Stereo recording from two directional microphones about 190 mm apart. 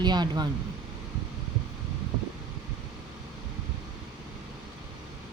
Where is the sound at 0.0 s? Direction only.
20° right (ahead or behind).